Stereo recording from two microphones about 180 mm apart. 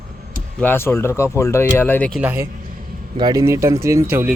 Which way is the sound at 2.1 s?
10° right (ahead or behind).